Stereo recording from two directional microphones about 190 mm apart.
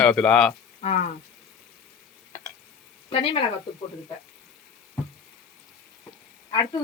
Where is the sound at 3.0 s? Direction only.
30° left (ahead or behind).